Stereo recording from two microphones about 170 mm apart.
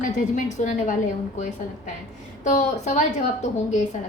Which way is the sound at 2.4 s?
45° left (ahead or behind).